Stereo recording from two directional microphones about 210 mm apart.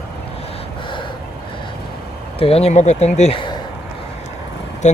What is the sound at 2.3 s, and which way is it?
Speech, 25° left (ahead or behind).